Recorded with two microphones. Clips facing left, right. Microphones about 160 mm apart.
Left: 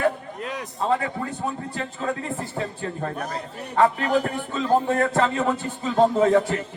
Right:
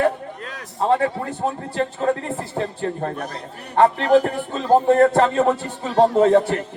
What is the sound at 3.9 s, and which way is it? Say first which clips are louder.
Speech: right 6 dB; 60° right (ahead or behind).